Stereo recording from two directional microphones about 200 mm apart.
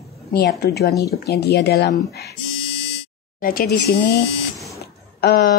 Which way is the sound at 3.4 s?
45° left (ahead or behind).